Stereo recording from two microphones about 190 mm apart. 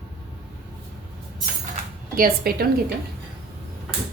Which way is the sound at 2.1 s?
50° right (ahead or behind).